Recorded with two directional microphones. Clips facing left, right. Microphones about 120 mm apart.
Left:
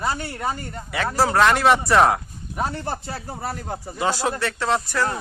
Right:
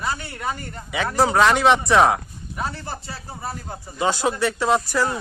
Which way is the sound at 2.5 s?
45° left (ahead or behind).